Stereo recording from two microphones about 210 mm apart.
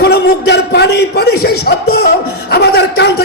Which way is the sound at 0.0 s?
50° left (ahead or behind).